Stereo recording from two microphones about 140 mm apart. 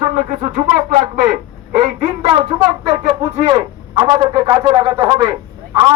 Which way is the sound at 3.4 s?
30° right (ahead or behind).